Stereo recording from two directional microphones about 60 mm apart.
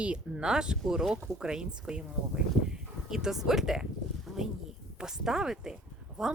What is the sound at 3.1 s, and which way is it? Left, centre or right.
A woman's voice, centre.